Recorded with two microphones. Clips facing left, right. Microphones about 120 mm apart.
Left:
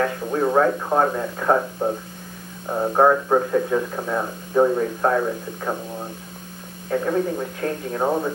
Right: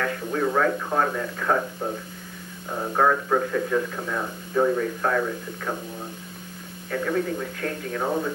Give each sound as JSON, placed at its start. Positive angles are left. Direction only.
{"t": 0.0, "sound": "speech", "side_deg": 30}